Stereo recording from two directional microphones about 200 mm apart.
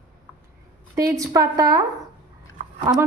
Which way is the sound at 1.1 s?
15° right (ahead or behind).